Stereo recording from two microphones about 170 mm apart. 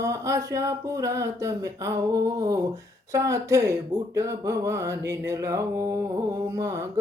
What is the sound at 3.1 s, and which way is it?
Speech, 20° right (ahead or behind).